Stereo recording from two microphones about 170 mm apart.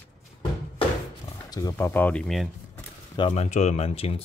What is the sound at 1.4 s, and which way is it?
Speech, 20° left (ahead or behind).